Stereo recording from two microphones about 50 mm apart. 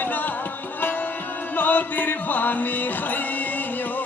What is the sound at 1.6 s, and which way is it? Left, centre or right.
Music, left.